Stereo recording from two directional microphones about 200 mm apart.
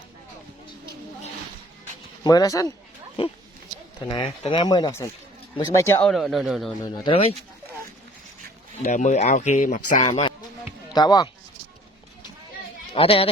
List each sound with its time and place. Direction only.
2.2 s speech: 20° left (ahead or behind)
3.2 s speech: 30° left (ahead or behind); by 6.7 s centre (ahead or behind)
6.8 s speech: 20° left (ahead or behind)
8.8 s speech: 35° left (ahead or behind)
10.9 s speech: 20° left (ahead or behind)
12.9 s speech: 30° left (ahead or behind)